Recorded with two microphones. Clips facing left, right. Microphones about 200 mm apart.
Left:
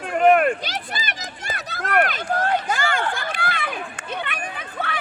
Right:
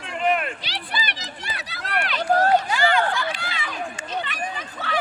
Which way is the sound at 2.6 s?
45° left (ahead or behind).